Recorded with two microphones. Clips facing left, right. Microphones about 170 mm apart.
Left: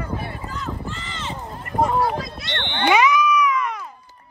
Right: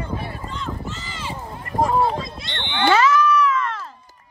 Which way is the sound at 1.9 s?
25° right (ahead or behind).